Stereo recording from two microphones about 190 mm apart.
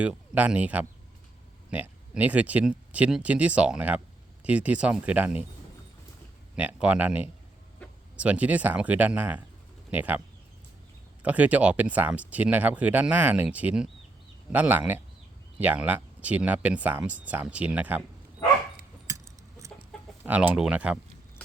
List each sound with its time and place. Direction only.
0.0 s speech: 5° right (ahead or behind)
6.6 s speech: 5° right (ahead or behind)
11.2 s speech: 10° right (ahead or behind)
19.0 s a sound: 15° right (ahead or behind)
20.2 s speech: 10° right (ahead or behind)